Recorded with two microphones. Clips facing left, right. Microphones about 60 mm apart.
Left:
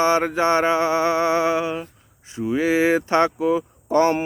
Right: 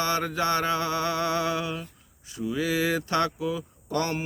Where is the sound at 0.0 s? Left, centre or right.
Left.